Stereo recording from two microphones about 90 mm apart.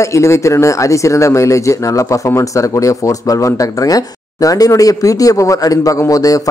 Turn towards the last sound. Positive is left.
turn(degrees=40)  # may be behind; listen again after turning